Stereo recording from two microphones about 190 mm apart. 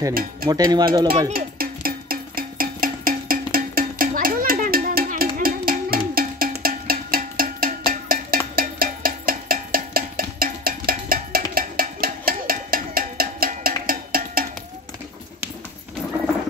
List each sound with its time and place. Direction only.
0.1 s speech: 50° right (ahead or behind)
0.5 s speech: 20° right (ahead or behind)
1.3 s music: 50° right (ahead or behind)